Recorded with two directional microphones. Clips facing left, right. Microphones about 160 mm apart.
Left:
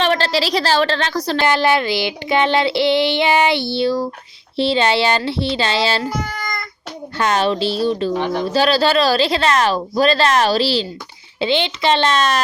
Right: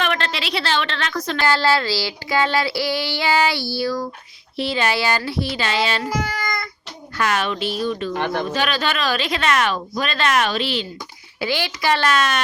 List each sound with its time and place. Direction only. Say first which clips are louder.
0.0 s a woman's voice: left 6 dB; 35° left (ahead or behind)
1.5 s a sound: left 1 dB; 20° left (ahead or behind)
7.2 s speech: left 4 dB; 30° left (ahead or behind)
8.1 s speech: left 3 dB; 60° right (ahead or behind)
8.5 s speech: left 7 dB; 35° left (ahead or behind)
11.3 s a sound: left 5 dB; 25° left (ahead or behind)